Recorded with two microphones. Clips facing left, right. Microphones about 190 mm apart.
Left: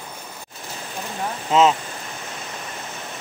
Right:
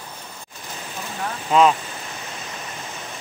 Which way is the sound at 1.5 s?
25° left (ahead or behind).